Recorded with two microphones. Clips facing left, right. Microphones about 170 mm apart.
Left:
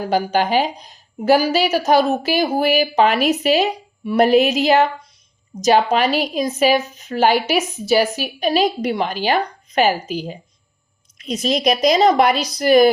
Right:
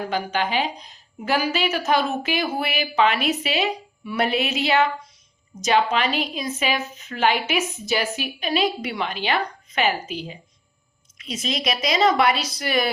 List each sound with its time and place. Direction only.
0.0 s a woman's voice: 40° left (ahead or behind)
8.0 s a woman's voice: centre (ahead or behind)
8.4 s a woman's voice: 40° left (ahead or behind)